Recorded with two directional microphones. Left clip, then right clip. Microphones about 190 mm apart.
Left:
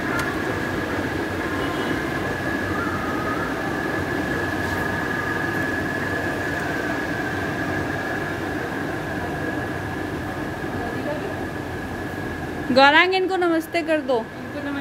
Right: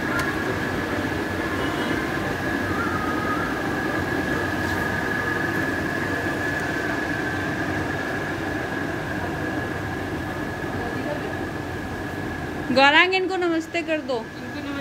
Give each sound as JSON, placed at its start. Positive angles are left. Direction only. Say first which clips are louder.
{"t": 12.7, "sound": "a woman's voice", "louder": "left 2 dB", "side_deg": 20}